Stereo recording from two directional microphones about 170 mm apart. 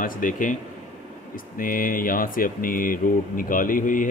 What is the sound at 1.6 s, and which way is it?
Speech, 55° left (ahead or behind).